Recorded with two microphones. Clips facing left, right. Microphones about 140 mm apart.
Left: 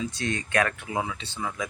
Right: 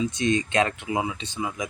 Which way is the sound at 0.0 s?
20° right (ahead or behind).